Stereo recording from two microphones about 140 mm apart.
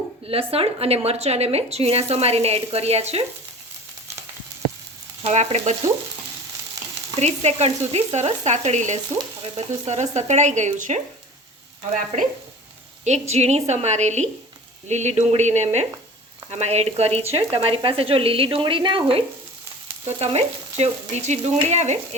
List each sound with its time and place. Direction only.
0.3 s speech: 45° right (ahead or behind)
5.2 s speech: 55° right (ahead or behind)
7.2 s speech: 50° right (ahead or behind)
13.1 s speech: 50° right (ahead or behind)